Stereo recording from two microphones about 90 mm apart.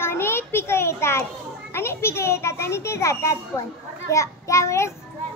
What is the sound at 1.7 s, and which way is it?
A child's voice, 30° left (ahead or behind).